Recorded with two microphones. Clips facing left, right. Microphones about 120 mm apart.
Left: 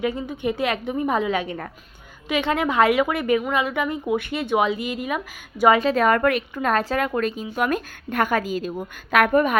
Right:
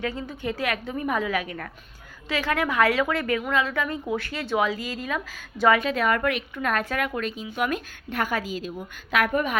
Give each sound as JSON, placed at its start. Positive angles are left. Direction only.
{"t": 0.0, "sound": "speech", "side_deg": 20}
{"t": 5.8, "sound": "a woman's voice", "side_deg": 40}
{"t": 6.6, "sound": "a woman's voice", "side_deg": 35}
{"t": 7.1, "sound": "a woman's voice", "side_deg": 45}